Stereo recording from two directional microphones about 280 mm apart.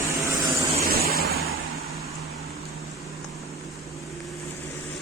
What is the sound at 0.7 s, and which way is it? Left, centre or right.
Vehicle, right.